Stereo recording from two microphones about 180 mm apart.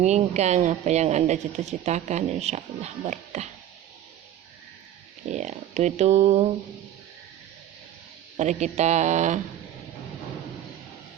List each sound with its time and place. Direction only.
0.0 s speech: 40° right (ahead or behind)
5.3 s speech: 40° right (ahead or behind)
8.4 s speech: 40° right (ahead or behind)